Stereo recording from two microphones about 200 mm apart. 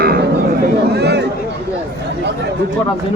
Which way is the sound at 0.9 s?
55° right (ahead or behind).